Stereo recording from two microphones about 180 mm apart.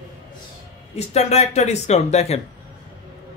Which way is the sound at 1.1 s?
35° left (ahead or behind).